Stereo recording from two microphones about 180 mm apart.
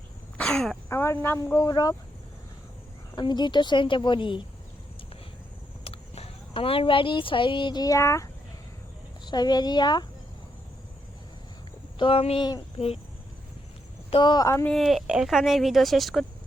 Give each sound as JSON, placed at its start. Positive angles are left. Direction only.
{"t": 0.3, "sound": "throat clearing", "side_deg": 5}
{"t": 0.9, "sound": "speech", "side_deg": 15}
{"t": 3.2, "sound": "speech", "side_deg": 25}
{"t": 5.8, "sound": "speech", "side_deg": 35}
{"t": 11.9, "sound": "speech", "side_deg": 30}
{"t": 14.1, "sound": "speech", "side_deg": 25}
{"t": 14.7, "sound": "speech", "side_deg": 0}